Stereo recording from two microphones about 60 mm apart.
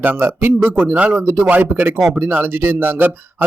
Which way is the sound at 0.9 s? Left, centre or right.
Right.